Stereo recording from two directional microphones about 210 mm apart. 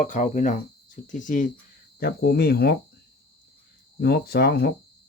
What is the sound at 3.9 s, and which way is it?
Speech, 50° left (ahead or behind).